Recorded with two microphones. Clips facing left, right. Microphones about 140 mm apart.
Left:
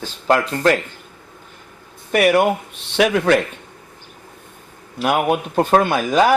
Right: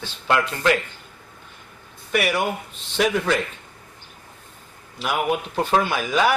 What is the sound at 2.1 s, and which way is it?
Speech, 55° left (ahead or behind).